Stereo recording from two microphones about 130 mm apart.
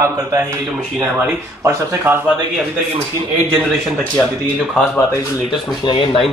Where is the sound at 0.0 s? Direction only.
20° right (ahead or behind).